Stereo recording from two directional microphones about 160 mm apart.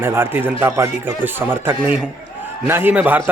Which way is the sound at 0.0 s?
15° right (ahead or behind).